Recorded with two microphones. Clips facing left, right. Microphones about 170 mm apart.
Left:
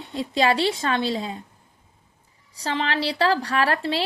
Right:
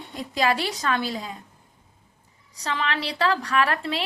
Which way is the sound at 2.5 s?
30° left (ahead or behind).